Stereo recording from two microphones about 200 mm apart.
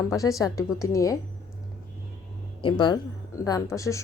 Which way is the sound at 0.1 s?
15° left (ahead or behind).